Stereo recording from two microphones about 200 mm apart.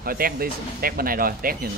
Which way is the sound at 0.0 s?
45° right (ahead or behind).